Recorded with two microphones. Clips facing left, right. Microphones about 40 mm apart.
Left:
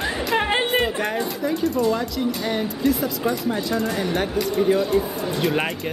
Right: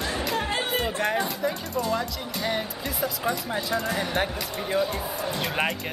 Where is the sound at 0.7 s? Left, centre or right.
Centre.